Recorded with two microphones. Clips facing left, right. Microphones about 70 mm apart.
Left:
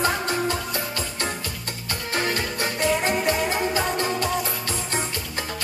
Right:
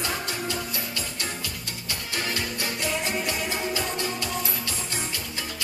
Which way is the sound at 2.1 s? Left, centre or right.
Left.